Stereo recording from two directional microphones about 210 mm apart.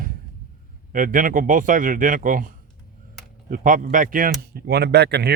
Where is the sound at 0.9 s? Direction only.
40° right (ahead or behind).